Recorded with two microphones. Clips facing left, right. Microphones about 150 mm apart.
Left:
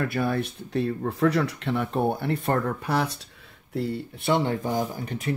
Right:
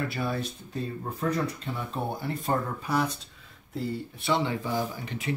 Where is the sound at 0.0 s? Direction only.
55° left (ahead or behind).